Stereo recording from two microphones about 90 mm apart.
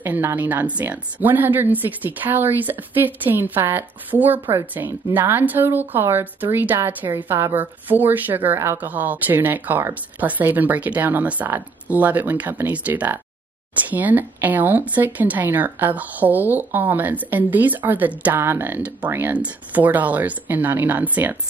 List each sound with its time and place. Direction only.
0.0 s speech: 20° right (ahead or behind)